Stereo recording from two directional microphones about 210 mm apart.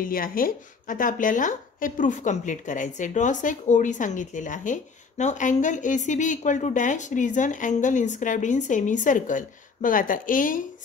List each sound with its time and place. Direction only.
0.0 s speech: 40° left (ahead or behind)